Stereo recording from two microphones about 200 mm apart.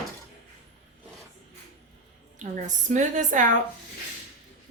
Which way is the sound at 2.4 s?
40° right (ahead or behind).